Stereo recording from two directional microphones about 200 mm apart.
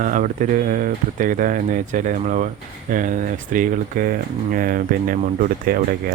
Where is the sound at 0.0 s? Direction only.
40° right (ahead or behind).